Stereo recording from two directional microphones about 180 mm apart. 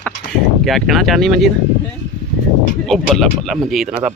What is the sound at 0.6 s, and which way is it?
Speech, centre (ahead or behind).